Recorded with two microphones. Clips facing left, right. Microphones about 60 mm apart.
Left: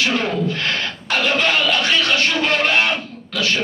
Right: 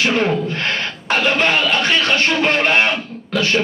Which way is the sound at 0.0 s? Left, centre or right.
Right.